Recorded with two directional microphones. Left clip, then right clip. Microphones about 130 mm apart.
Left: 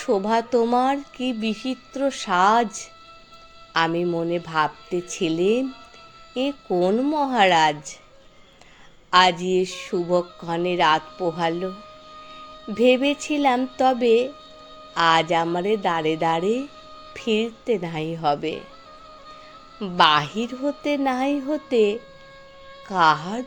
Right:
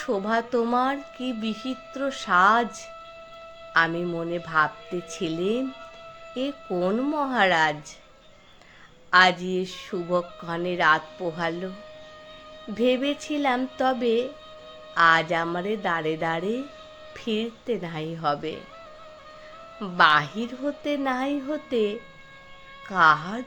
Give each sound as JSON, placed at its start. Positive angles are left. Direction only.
{"t": 0.0, "sound": "speech", "side_deg": 50}
{"t": 3.8, "sound": "speech", "side_deg": 50}
{"t": 9.0, "sound": "speech", "side_deg": 50}
{"t": 12.7, "sound": "speech", "side_deg": 50}
{"t": 19.8, "sound": "speech", "side_deg": 50}